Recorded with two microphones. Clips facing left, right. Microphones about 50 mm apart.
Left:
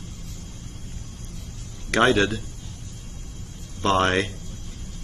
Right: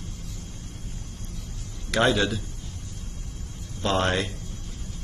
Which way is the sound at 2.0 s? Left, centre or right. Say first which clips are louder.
Left 3 dB; left.